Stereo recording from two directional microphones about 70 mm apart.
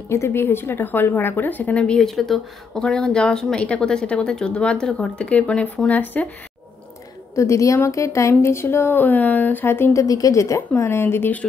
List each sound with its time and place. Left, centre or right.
0.1 s a woman's voice: left; by 2.0 s centre
2.0 s speech: centre; by 6.2 s left
7.3 s a woman's voice: left
10.0 s a woman's voice: left
10.7 s a woman's voice: left